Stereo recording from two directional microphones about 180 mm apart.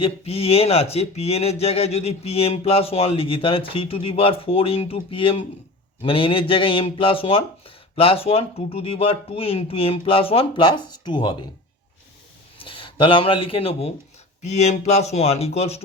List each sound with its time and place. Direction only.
0.0 s speech: 35° left (ahead or behind)
12.6 s speech: 30° left (ahead or behind)